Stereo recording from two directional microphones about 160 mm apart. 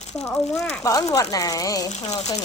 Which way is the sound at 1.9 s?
45° left (ahead or behind).